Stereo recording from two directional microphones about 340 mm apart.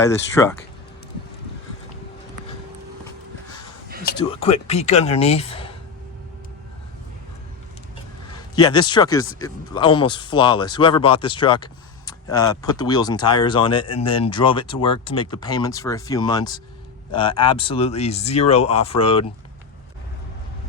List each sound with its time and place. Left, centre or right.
0.0 s speech: centre
4.0 s speech: centre
8.3 s a man's voice: centre